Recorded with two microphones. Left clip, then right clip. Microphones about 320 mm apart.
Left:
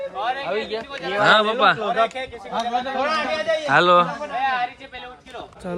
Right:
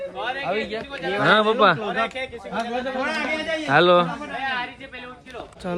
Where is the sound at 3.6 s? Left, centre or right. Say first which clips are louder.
Left 1 dB; centre.